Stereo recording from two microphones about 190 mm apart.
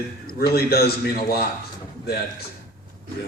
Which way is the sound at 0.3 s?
55° left (ahead or behind).